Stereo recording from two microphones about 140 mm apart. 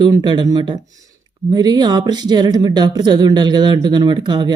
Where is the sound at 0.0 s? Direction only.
30° right (ahead or behind).